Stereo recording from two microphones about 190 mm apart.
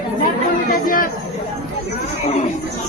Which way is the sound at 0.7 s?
45° left (ahead or behind).